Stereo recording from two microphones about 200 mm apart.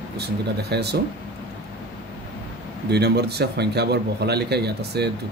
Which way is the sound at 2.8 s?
55° right (ahead or behind).